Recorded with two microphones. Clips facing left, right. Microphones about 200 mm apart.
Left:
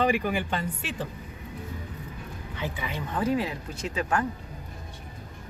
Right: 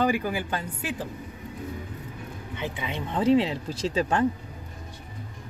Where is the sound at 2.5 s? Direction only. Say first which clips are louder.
Right 1 dB; 20° right (ahead or behind).